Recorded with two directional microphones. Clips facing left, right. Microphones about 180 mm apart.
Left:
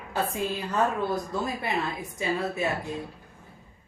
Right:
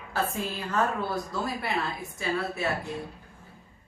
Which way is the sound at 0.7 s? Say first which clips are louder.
Left 1 dB; 15° left (ahead or behind).